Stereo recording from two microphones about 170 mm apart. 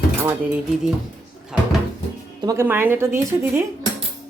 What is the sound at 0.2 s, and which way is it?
Speech, 15° right (ahead or behind).